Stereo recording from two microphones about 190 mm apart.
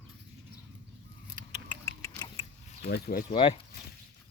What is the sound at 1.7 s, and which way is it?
Rodents, 15° left (ahead or behind).